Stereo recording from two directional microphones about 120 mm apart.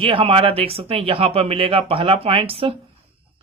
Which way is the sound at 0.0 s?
50° right (ahead or behind).